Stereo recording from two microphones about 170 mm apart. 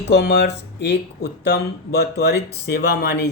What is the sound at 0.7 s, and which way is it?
Speech, 85° left.